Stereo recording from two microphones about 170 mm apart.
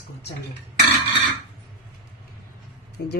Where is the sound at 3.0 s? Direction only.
70° left (ahead or behind).